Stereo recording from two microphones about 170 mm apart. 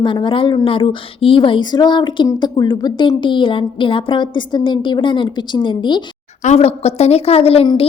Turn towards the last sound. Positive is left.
turn(degrees=35)  # may be behind; listen again after turning